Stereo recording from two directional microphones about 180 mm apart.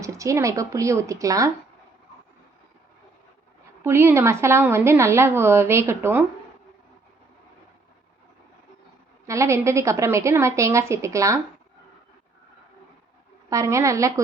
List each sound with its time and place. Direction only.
0.0 s speech: 15° right (ahead or behind)
3.8 s speech: 15° right (ahead or behind)
9.2 s speech: 15° right (ahead or behind)
13.5 s speech: 15° right (ahead or behind)